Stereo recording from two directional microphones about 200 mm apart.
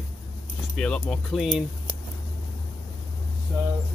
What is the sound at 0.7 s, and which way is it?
Speech, 5° left (ahead or behind).